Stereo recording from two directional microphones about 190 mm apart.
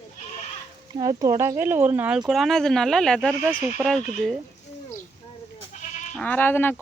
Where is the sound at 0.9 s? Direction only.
20° right (ahead or behind); by 4.4 s centre (ahead or behind).